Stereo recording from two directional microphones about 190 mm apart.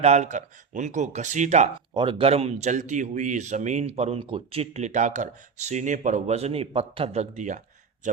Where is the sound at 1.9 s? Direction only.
25° right (ahead or behind).